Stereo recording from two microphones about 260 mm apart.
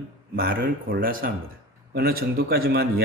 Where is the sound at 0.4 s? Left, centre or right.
Right.